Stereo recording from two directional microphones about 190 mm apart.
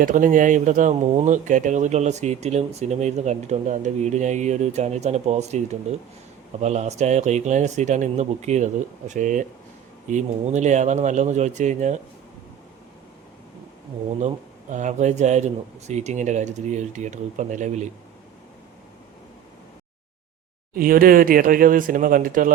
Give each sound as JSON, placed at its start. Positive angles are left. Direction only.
{"t": 0.0, "sound": "speech", "side_deg": -45}
{"t": 14.2, "sound": "speech", "side_deg": -40}
{"t": 20.7, "sound": "speech", "side_deg": -50}